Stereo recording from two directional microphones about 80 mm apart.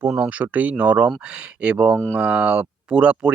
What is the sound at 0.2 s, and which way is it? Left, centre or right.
Speech, centre.